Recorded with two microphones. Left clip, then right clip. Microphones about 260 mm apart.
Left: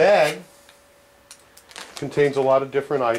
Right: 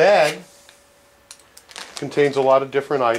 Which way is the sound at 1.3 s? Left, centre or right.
Centre.